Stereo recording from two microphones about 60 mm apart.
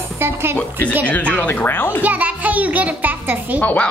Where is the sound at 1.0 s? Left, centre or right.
Left.